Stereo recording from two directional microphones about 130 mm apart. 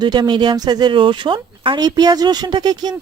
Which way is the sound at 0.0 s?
35° right (ahead or behind).